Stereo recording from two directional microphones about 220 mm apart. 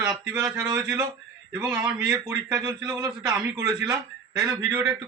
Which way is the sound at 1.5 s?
10° right (ahead or behind).